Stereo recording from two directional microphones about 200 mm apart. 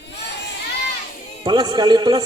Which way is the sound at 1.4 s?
20° right (ahead or behind).